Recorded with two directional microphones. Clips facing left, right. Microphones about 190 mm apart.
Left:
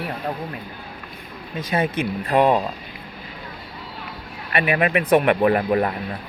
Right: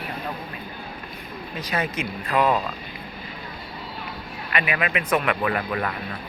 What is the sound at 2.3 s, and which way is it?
Speech, 30° left (ahead or behind).